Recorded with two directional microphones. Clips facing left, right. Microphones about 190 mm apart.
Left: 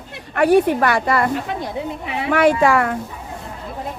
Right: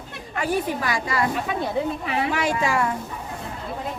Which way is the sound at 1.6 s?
20° left (ahead or behind).